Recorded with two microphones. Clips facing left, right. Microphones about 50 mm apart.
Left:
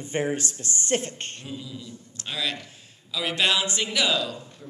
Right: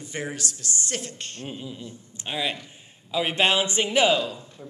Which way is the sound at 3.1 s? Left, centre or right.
Right.